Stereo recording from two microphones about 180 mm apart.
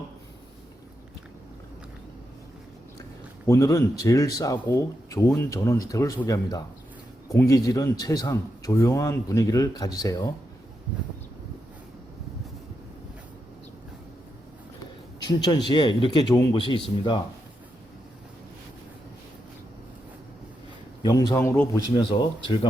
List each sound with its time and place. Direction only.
3.4 s speech: 15° left (ahead or behind)
15.2 s speech: 25° left (ahead or behind)
21.0 s speech: 20° left (ahead or behind)